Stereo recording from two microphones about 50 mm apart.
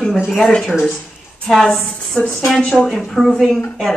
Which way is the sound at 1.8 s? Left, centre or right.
Centre.